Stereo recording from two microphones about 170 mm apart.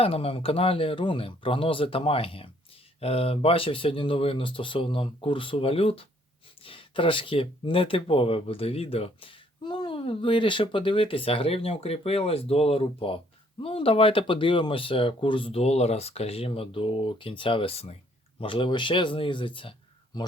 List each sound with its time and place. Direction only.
0.0 s speech: 35° left (ahead or behind)